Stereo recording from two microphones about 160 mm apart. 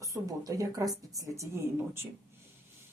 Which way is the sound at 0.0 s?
20° right (ahead or behind).